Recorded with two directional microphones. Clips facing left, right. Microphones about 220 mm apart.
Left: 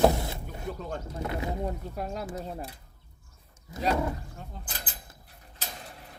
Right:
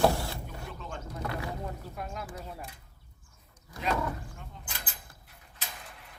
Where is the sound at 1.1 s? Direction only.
25° left (ahead or behind).